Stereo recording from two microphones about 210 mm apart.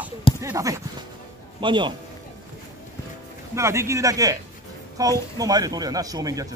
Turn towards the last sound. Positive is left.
turn(degrees=-15)  # may be behind; listen again after turning